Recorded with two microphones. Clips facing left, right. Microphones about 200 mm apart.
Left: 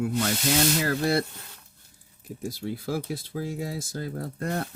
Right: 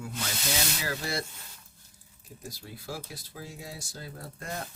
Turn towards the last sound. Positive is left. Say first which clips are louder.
# left 9 dB
turn(degrees=60)  # may be behind; listen again after turning